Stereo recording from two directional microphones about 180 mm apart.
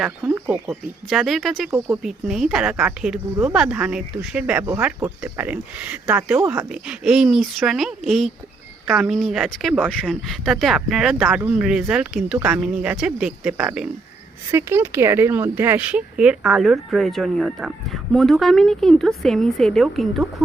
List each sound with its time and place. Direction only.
0.3 s a woman's voice: 10° right (ahead or behind)